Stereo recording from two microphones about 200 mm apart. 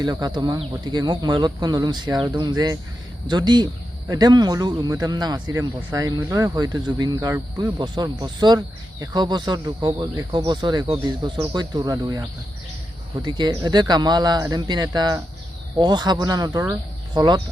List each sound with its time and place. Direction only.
0.0 s speech: 20° right (ahead or behind)
13.2 s speech: 20° right (ahead or behind)